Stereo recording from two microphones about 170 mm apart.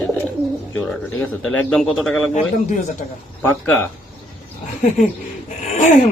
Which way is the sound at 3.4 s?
10° left (ahead or behind).